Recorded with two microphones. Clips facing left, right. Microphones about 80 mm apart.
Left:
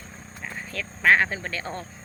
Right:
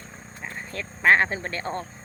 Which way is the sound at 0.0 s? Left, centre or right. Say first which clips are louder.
Even; centre.